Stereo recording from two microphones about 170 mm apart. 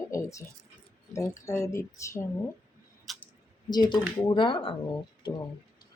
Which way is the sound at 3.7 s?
25° left (ahead or behind).